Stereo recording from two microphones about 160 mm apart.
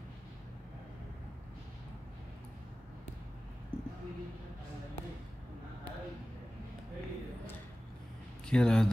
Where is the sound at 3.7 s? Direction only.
35° right (ahead or behind).